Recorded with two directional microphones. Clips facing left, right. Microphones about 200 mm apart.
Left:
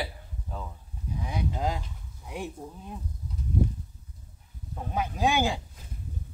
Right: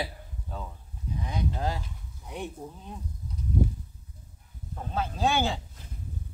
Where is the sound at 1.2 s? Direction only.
10° left (ahead or behind).